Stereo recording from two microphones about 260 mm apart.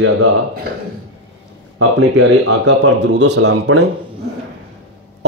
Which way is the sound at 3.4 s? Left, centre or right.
Right.